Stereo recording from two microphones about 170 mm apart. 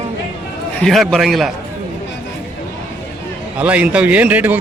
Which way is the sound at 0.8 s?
Centre (ahead or behind).